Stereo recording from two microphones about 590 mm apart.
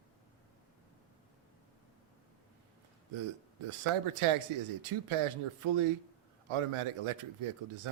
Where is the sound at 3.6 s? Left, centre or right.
Right.